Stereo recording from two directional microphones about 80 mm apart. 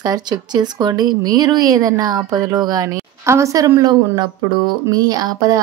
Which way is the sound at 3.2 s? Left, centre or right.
Right.